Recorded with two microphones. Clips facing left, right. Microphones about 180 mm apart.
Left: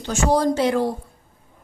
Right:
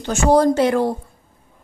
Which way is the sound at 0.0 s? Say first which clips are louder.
Right 4 dB; 55° right (ahead or behind).